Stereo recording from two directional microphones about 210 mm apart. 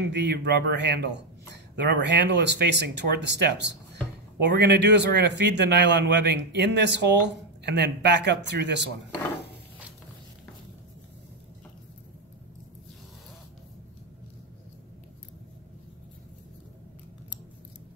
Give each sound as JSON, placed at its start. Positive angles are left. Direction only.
{"t": 0.0, "sound": "speech", "side_deg": -55}